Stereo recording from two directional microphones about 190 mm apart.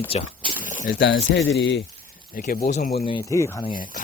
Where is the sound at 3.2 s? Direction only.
15° left (ahead or behind).